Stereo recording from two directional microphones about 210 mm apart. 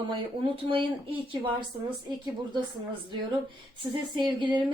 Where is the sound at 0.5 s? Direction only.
25° right (ahead or behind).